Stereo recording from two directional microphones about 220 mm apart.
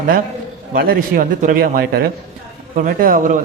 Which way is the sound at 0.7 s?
40° right (ahead or behind).